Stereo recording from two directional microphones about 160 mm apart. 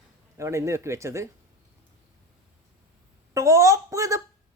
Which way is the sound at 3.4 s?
20° right (ahead or behind).